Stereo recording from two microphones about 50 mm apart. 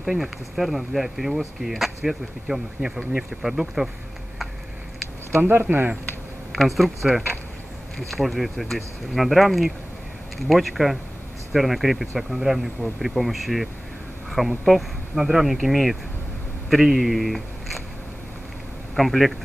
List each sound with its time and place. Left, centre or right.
0.0 s speech: centre
5.5 s speech: right
6.5 s speech: centre
8.1 s speech: centre
18.9 s speech: centre